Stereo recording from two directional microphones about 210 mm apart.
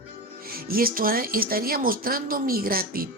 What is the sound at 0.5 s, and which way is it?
Speech, 45° right (ahead or behind).